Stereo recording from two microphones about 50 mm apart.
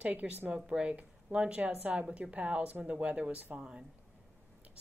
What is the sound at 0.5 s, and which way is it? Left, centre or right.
A woman's voice, right.